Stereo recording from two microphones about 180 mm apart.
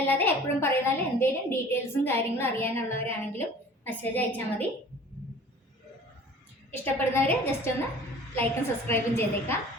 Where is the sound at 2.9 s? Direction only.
30° right (ahead or behind).